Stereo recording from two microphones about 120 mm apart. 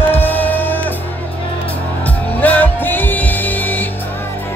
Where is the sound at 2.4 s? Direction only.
15° left (ahead or behind).